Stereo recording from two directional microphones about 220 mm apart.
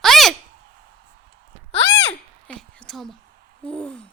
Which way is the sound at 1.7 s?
55° left (ahead or behind).